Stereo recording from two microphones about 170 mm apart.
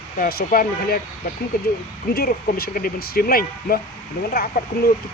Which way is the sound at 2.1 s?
65° left (ahead or behind).